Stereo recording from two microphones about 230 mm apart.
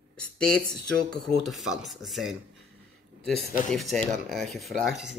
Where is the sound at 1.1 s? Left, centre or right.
Centre.